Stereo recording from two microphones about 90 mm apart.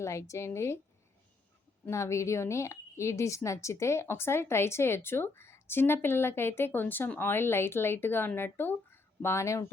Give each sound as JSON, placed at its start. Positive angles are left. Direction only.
{"t": 0.0, "sound": "a woman's voice", "side_deg": 35}
{"t": 1.9, "sound": "a woman's voice", "side_deg": 35}